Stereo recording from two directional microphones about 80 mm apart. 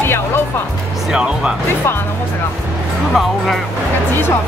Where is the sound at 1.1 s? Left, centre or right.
Centre.